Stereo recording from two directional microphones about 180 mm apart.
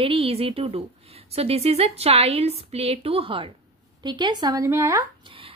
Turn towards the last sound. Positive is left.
turn(degrees=-20)  # may be behind; listen again after turning